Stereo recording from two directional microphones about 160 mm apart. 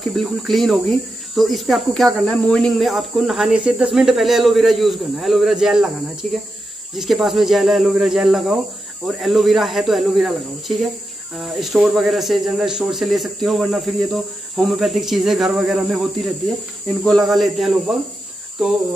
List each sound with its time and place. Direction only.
0.0 s speech: centre (ahead or behind)
6.2 s speech: 50° right (ahead or behind)
7.0 s speech: centre (ahead or behind)